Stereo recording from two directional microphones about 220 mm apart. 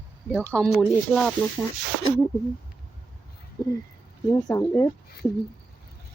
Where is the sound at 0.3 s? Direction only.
5° left (ahead or behind).